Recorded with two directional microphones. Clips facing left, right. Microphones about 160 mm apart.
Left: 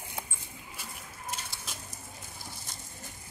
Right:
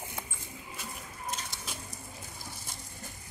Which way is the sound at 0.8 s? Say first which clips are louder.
Right 2 dB; 5° left (ahead or behind).